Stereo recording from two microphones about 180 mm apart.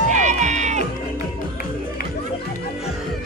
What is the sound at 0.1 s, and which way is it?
Music, 40° right (ahead or behind).